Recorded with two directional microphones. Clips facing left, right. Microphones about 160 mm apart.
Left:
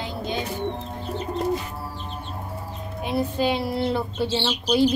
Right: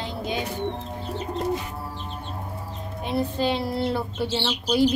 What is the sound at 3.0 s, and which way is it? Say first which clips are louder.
A woman's voice: left 1 dB; 5° left (ahead or behind).